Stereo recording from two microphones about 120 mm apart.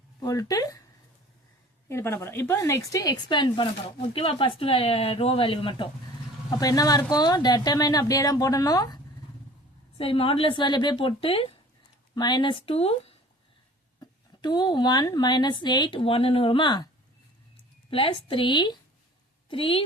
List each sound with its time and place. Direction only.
0.2 s a woman's voice: 30° left (ahead or behind)
1.9 s a woman's voice: 20° left (ahead or behind); by 3.7 s 40° left (ahead or behind)
3.8 s speech: 55° left (ahead or behind)
6.5 s a woman's voice: 30° left (ahead or behind)
10.0 s speech: 50° left (ahead or behind)
12.1 s speech: 35° left (ahead or behind); by 13.1 s 55° left (ahead or behind)
14.0 s a woman's voice: 35° left (ahead or behind)
17.9 s speech: 45° left (ahead or behind)